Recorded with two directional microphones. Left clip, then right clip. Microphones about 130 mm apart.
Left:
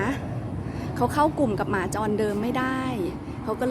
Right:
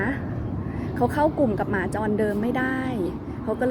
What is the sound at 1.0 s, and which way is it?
Speech, 5° left (ahead or behind).